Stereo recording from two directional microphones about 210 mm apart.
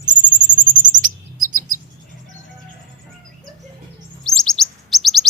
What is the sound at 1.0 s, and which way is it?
Chirp, 40° right (ahead or behind).